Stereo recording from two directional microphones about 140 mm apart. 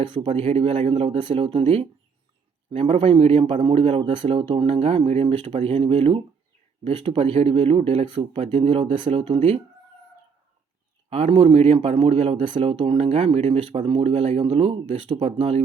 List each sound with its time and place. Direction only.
0.2 s speech: 50° right (ahead or behind)
11.1 s speech: 45° right (ahead or behind)